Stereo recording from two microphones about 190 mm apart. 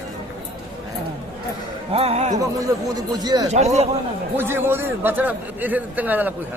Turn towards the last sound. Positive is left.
turn(degrees=-10)  # may be behind; listen again after turning